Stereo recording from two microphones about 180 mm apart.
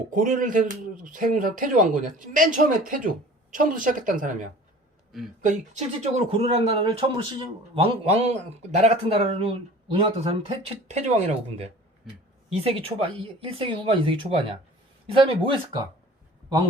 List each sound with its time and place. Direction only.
0.1 s speech: 45° right (ahead or behind)
5.1 s speech: centre (ahead or behind)
6.0 s a man's voice: 35° right (ahead or behind)